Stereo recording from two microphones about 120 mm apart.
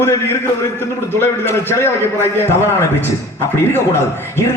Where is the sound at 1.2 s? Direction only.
20° left (ahead or behind).